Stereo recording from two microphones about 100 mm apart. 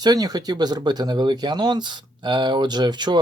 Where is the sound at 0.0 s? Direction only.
40° right (ahead or behind).